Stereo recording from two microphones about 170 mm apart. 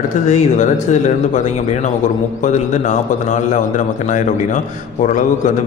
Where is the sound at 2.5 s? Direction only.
45° left (ahead or behind).